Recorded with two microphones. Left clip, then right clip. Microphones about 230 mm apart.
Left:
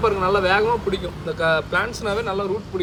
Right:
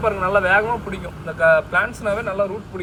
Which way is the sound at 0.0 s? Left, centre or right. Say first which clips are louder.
Left 1 dB; centre.